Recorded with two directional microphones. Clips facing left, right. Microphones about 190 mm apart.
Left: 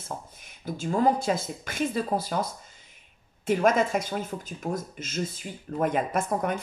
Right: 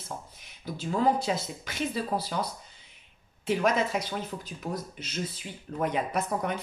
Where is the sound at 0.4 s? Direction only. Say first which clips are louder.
Left 3 dB; 50° left (ahead or behind).